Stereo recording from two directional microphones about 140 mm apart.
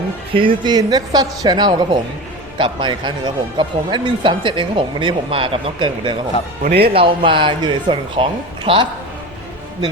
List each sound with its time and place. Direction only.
0.3 s a woman's voice: 35° right (ahead or behind)